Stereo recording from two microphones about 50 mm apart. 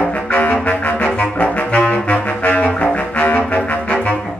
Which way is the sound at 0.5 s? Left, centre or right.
Left.